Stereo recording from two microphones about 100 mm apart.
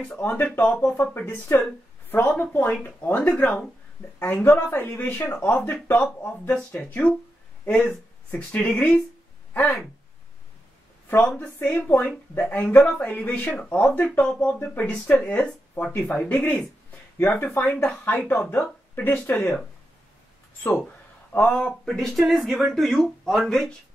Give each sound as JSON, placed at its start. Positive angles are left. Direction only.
{"t": 0.0, "sound": "a woman's voice", "side_deg": 20}
{"t": 3.4, "sound": "speech", "side_deg": 5}
{"t": 4.2, "sound": "speech", "side_deg": 20}
{"t": 11.3, "sound": "speech", "side_deg": 15}
{"t": 14.2, "sound": "speech", "side_deg": 10}
{"t": 17.2, "sound": "speech", "side_deg": 25}
{"t": 21.5, "sound": "speech", "side_deg": 5}